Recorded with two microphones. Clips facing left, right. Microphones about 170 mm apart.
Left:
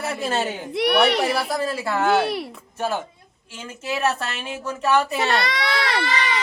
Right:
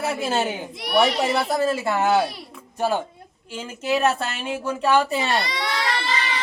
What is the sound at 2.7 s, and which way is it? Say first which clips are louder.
Speech: right 3 dB; 15° right (ahead or behind).